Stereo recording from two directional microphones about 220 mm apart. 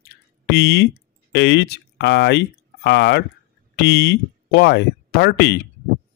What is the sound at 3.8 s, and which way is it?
Speech, 50° left (ahead or behind).